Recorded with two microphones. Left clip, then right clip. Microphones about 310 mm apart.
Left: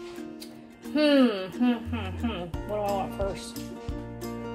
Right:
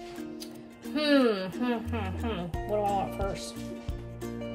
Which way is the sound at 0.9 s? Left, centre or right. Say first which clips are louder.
Left 3 dB; centre.